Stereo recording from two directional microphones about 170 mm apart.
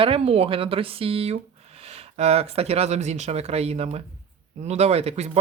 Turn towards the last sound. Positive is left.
turn(degrees=-35)  # may be behind; listen again after turning